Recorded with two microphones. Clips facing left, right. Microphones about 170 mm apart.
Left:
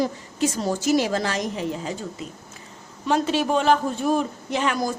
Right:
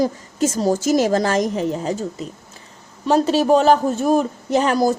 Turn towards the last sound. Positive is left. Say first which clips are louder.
# right 7 dB
turn(degrees=-40)  # may be behind; listen again after turning